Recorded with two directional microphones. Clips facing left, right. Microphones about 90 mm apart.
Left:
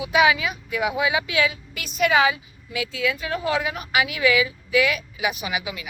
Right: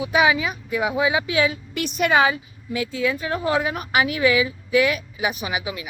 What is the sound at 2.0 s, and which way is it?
A woman's voice, 40° right (ahead or behind).